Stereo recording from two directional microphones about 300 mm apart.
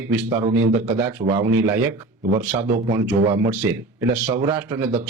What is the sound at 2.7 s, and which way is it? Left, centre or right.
Speech, centre.